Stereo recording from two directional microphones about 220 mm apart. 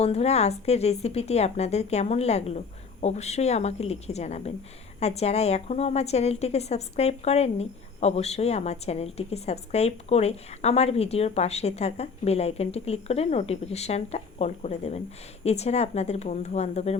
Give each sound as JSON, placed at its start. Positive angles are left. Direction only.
{"t": 0.0, "sound": "a woman's voice", "side_deg": 30}